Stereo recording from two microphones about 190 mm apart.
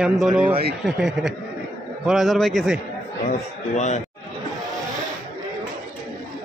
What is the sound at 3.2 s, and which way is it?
Speech, 40° left (ahead or behind).